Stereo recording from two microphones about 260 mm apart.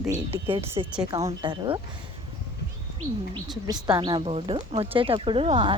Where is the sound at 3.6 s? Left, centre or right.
Centre.